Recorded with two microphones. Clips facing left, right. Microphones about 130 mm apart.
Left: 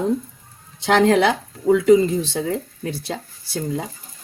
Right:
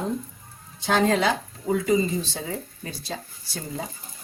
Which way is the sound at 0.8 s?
75° left (ahead or behind).